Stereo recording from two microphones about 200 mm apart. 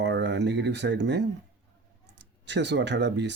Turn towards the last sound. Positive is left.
turn(degrees=-60)  # may be behind; listen again after turning